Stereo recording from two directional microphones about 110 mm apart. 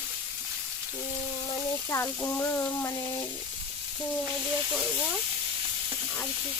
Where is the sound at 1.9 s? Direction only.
20° left (ahead or behind).